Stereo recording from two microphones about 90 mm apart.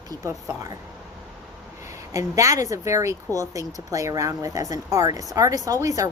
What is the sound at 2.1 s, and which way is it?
Speech, 35° right (ahead or behind).